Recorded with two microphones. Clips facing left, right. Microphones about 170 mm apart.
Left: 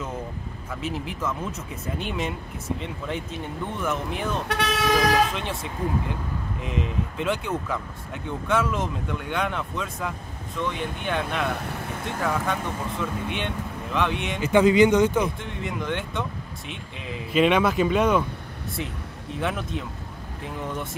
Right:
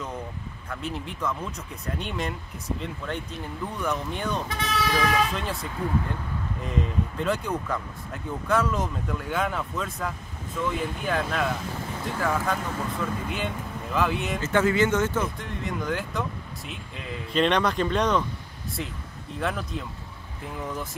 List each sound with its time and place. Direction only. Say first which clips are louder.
0.7 s speech: left 2 dB; centre (ahead or behind)
4.5 s speech: left 3 dB; 70° left (ahead or behind)
5.3 s speech: even; centre (ahead or behind)
14.4 s speech: left 6 dB; 15° left (ahead or behind)
15.4 s speech: even; centre (ahead or behind)
19.4 s speech: left 1 dB; centre (ahead or behind)